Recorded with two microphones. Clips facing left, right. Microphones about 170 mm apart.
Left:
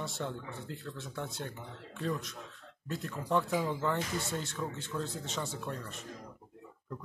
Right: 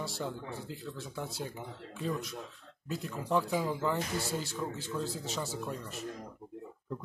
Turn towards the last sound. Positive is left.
turn(degrees=-5)  # may be behind; listen again after turning